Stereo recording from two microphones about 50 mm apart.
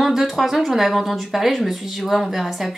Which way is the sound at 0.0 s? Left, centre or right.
Centre.